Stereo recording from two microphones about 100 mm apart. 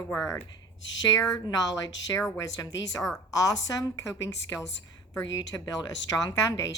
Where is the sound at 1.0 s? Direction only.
40° left (ahead or behind).